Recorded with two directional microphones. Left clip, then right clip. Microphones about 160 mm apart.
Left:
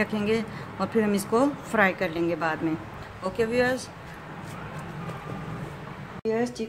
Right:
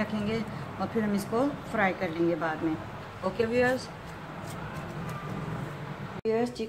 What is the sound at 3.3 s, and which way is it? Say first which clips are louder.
Speech: left 2 dB; 75° left (ahead or behind).